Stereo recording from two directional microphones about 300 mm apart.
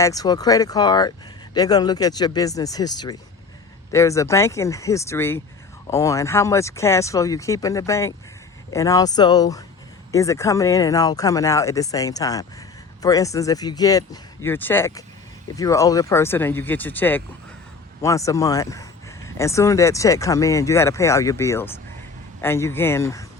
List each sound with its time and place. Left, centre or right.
0.0 s speech: centre